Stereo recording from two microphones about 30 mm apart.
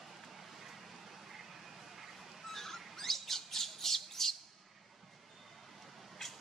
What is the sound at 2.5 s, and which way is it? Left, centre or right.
Squawk, centre.